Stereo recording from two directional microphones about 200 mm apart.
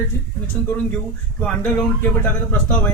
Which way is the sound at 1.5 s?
10° left (ahead or behind).